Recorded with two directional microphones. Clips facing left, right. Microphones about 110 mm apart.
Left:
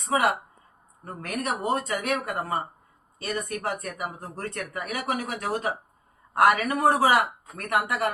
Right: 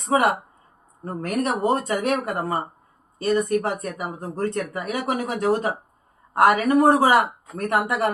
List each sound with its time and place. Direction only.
1.0 s speech: 30° right (ahead or behind)
2.0 s speech: 40° right (ahead or behind)
3.2 s speech: 25° right (ahead or behind)